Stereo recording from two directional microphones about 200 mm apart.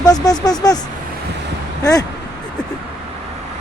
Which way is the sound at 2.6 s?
5° left (ahead or behind).